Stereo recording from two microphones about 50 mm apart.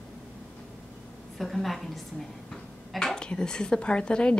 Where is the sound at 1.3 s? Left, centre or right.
Centre.